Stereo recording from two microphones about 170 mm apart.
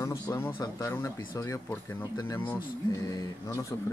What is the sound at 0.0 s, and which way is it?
Speech, 15° left (ahead or behind).